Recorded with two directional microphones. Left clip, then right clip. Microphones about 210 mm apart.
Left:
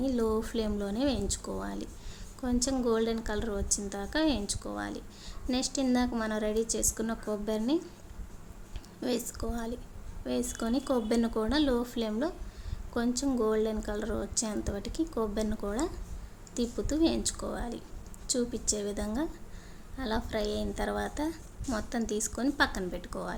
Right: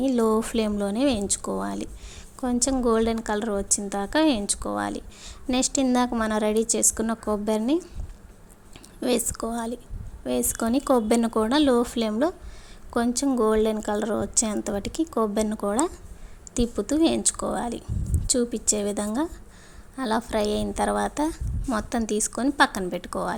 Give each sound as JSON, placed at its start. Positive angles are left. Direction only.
{"t": 0.0, "sound": "a woman's voice", "side_deg": -35}
{"t": 9.0, "sound": "a woman's voice", "side_deg": -35}